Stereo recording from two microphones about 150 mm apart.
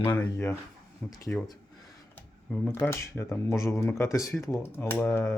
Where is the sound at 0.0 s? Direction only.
15° left (ahead or behind).